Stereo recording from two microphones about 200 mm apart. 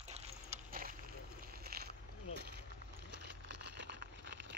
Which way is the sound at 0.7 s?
45° right (ahead or behind).